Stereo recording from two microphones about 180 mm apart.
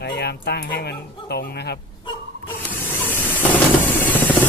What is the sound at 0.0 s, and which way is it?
Speech, 65° left (ahead or behind).